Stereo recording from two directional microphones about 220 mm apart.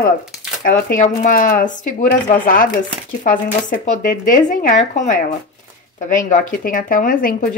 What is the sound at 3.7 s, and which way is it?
Speech, 40° left (ahead or behind).